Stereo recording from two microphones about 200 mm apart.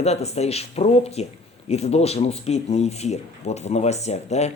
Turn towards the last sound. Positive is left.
turn(degrees=35)  # may be behind; listen again after turning